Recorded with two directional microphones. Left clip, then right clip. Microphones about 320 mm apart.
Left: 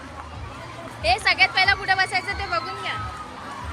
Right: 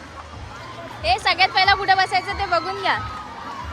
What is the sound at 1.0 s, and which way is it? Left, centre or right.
Speech, centre.